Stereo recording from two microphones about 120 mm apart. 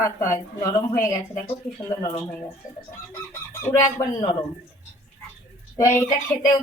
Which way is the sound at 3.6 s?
20° left (ahead or behind).